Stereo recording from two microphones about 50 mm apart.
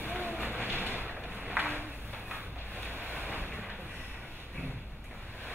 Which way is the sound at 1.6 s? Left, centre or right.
Right.